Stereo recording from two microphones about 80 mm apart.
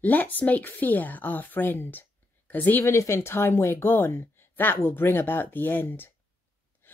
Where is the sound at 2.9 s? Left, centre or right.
Left.